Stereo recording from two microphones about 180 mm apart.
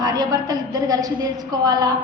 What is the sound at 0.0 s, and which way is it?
A woman's voice, 20° right (ahead or behind).